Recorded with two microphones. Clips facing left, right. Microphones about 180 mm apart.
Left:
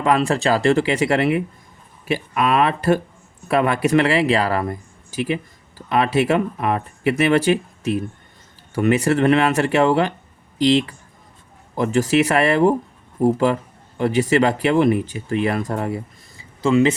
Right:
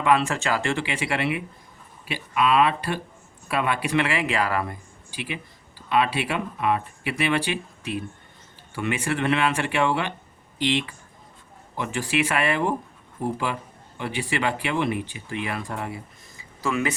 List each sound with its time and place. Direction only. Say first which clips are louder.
0.0 s speech: left 4 dB; 40° left (ahead or behind)
16.6 s speech: left 10 dB; 25° left (ahead or behind)